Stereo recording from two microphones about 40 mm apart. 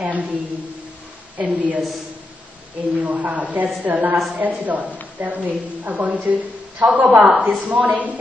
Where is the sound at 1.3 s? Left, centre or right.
Right.